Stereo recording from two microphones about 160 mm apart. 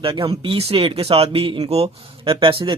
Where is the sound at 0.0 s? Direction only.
35° right (ahead or behind).